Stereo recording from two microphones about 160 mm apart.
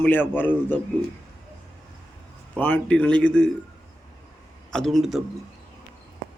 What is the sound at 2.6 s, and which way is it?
Speech, 10° left (ahead or behind).